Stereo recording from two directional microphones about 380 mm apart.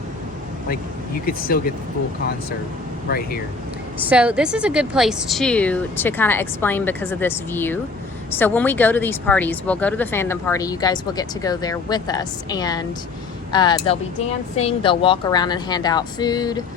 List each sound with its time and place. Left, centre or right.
1.2 s speech: left
3.1 s speech: left
4.0 s a woman's voice: centre